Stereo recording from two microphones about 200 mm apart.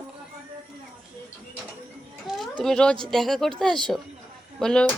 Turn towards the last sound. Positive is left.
turn(degrees=5)  # may be behind; listen again after turning